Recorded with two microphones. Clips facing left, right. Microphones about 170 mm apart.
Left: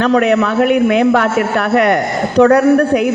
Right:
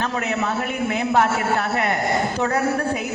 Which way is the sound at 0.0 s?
80° left.